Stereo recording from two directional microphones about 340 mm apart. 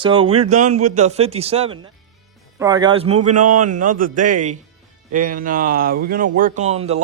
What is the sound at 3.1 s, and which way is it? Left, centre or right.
Speech, right.